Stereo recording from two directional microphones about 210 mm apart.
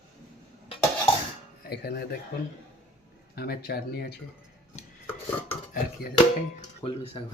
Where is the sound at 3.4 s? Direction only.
45° left (ahead or behind).